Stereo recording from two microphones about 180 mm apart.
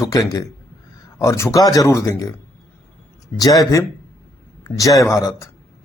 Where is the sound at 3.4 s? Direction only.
20° left (ahead or behind).